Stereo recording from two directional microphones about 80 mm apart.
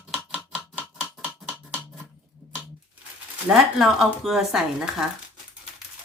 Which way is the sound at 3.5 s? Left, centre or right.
Centre.